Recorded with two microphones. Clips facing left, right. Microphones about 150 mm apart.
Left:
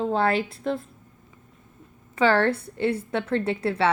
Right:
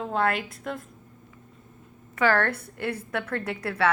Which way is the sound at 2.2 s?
30° left (ahead or behind).